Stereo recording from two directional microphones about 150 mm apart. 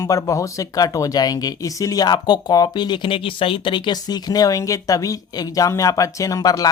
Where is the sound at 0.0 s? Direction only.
20° left (ahead or behind).